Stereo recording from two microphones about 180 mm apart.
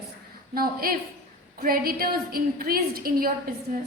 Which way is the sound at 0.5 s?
55° right (ahead or behind).